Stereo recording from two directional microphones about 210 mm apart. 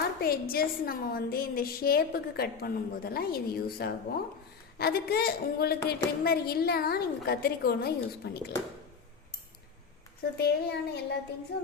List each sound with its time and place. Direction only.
0.2 s a woman's voice: 45° left (ahead or behind)
10.3 s a woman's voice: 50° left (ahead or behind)